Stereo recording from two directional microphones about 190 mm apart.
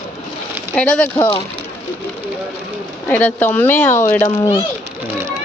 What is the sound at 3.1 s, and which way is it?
Speech, 10° left (ahead or behind).